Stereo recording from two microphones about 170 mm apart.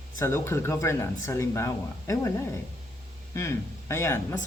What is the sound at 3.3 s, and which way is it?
Speech, 15° left (ahead or behind).